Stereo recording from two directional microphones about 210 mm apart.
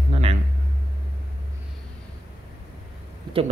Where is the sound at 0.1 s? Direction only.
30° right (ahead or behind).